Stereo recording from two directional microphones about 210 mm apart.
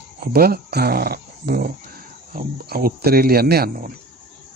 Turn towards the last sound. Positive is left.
turn(degrees=-50)  # may be behind; listen again after turning